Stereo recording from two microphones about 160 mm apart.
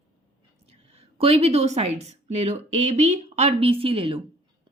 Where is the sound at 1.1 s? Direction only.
40° right (ahead or behind).